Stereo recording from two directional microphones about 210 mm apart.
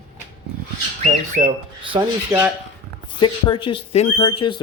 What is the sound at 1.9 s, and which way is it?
Speech, 20° right (ahead or behind).